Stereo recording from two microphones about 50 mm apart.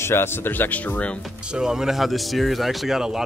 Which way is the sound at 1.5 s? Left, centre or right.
Centre.